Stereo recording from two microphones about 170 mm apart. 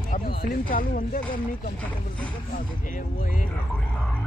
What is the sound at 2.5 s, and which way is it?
Speech, 50° left (ahead or behind).